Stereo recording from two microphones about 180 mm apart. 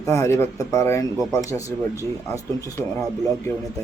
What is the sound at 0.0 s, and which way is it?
Speech, 15° left (ahead or behind).